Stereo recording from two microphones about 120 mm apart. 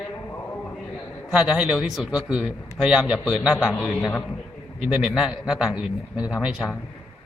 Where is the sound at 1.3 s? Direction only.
5° right (ahead or behind).